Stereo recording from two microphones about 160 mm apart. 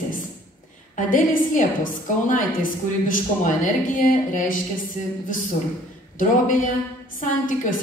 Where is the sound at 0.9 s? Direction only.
55° left (ahead or behind).